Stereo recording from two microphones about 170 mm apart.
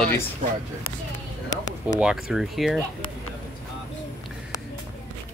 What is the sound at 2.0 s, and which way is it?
Speech, 5° right (ahead or behind).